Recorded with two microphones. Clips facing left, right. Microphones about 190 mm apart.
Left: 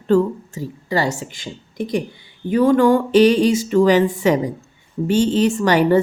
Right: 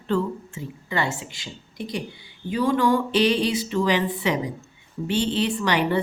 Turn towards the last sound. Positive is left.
turn(degrees=45)  # may be behind; listen again after turning